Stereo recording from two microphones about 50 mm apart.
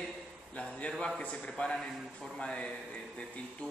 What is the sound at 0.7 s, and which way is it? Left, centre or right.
A man's voice, left.